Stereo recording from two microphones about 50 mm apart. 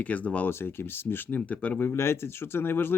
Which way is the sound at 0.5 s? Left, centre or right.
Left.